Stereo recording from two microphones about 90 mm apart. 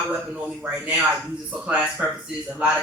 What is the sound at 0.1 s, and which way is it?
A man's voice, 15° right (ahead or behind).